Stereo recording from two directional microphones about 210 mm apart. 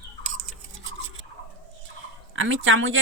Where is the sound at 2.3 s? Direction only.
65° right (ahead or behind).